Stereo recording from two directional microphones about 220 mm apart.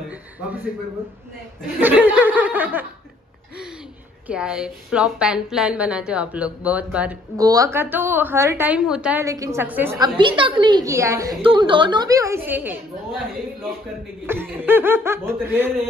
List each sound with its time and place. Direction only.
1.8 s a woman's voice: 10° right (ahead or behind)
4.3 s a woman's voice: 5° right (ahead or behind)
14.2 s a woman's voice: 10° right (ahead or behind)